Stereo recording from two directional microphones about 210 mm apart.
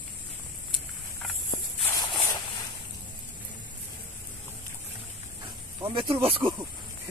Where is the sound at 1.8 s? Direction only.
20° left (ahead or behind).